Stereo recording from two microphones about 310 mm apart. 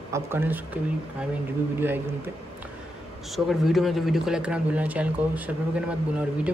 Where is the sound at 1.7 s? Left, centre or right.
Centre.